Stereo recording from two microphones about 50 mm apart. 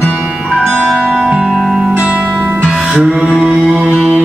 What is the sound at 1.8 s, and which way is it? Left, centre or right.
Music, centre.